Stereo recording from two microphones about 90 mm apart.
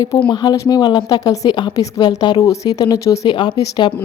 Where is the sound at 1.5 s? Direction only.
55° left (ahead or behind).